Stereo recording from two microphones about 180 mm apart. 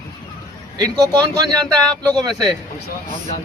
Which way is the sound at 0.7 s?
20° right (ahead or behind).